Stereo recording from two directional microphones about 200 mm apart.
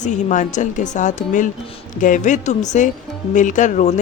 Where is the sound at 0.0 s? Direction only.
40° left (ahead or behind).